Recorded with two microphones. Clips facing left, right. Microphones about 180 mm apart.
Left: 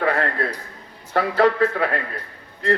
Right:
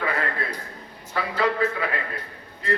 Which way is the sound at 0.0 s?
65° left (ahead or behind).